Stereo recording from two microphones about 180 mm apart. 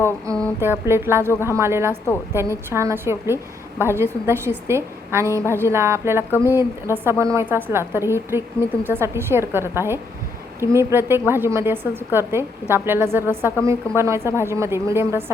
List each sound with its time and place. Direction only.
0.3 s music: 20° right (ahead or behind)
0.6 s a woman's voice: 15° right (ahead or behind)